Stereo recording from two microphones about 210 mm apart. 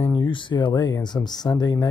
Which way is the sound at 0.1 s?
25° left (ahead or behind).